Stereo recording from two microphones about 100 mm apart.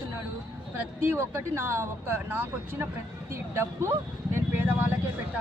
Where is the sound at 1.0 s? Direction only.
25° right (ahead or behind).